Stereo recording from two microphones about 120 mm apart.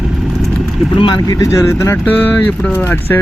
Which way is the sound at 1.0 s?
35° left (ahead or behind).